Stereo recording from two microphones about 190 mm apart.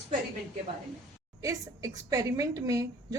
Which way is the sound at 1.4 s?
15° right (ahead or behind).